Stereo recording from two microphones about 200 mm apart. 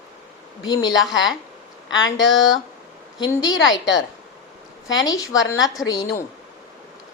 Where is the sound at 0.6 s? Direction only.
20° left (ahead or behind).